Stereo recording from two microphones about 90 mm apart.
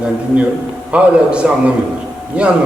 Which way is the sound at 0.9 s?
10° right (ahead or behind).